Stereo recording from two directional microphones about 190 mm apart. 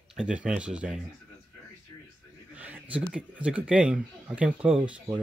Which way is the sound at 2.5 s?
5° right (ahead or behind).